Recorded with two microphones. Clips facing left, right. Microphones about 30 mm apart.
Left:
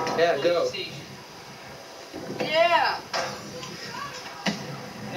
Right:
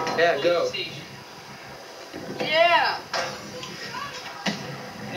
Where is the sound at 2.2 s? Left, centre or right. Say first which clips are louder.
Right 2 dB; centre.